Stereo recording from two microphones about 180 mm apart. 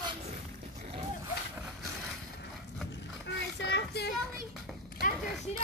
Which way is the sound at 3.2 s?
70° left (ahead or behind).